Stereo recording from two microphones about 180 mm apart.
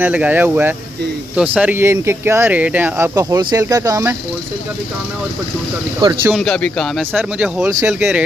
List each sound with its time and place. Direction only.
0.0 s speech: 10° right (ahead or behind)
3.2 s speech: 20° right (ahead or behind)
6.2 s speech: centre (ahead or behind)